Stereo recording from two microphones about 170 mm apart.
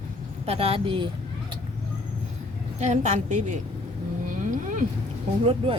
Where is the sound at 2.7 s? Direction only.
45° right (ahead or behind).